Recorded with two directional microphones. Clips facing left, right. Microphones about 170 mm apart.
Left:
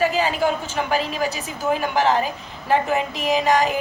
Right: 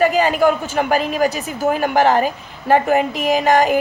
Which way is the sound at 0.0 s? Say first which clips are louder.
Right 5 dB; 50° right (ahead or behind).